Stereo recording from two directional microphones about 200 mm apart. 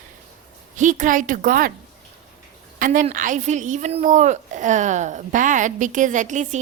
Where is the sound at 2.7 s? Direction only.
45° right (ahead or behind).